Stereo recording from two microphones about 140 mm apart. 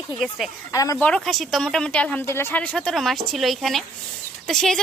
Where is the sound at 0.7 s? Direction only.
25° left (ahead or behind).